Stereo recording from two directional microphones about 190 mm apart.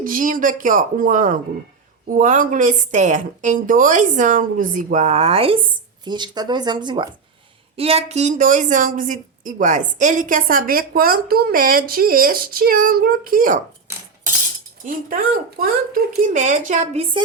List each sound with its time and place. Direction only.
0.0 s a woman's voice: 45° right (ahead or behind)
14.8 s a woman's voice: 50° right (ahead or behind); by 17.2 s 30° right (ahead or behind)